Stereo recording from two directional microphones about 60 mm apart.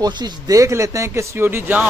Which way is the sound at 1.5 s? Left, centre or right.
Right.